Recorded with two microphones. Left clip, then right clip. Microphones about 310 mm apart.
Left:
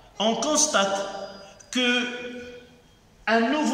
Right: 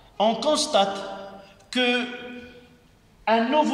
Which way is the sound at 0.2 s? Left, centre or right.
Centre.